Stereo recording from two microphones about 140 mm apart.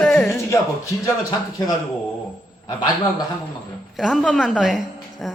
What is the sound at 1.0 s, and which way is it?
Speech, 25° left (ahead or behind).